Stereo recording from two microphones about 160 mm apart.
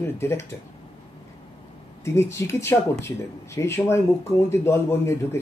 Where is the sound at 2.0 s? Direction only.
15° left (ahead or behind).